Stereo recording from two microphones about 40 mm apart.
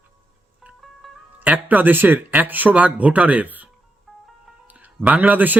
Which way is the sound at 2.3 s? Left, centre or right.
Right.